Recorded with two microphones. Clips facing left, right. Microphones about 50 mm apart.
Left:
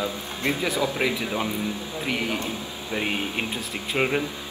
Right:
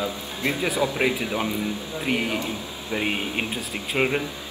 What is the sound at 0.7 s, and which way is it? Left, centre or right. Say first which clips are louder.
Speech: right 1 dB; right.